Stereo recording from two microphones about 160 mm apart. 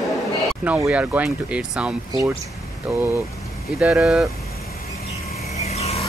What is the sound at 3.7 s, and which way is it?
Speech, centre (ahead or behind).